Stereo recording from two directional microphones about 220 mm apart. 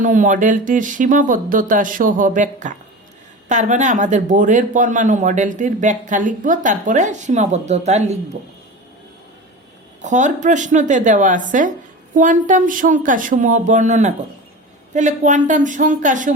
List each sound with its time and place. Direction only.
0.0 s speech: 35° right (ahead or behind)
10.0 s speech: 35° right (ahead or behind)